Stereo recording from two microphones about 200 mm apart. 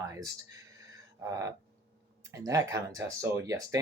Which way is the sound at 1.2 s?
15° right (ahead or behind).